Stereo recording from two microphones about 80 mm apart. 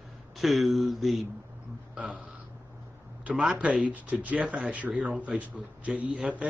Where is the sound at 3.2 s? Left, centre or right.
Centre.